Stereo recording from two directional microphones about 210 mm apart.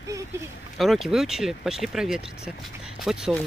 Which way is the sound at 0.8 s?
Centre (ahead or behind).